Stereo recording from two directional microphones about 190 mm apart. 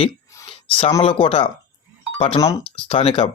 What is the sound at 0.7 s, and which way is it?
Speech, 30° left (ahead or behind).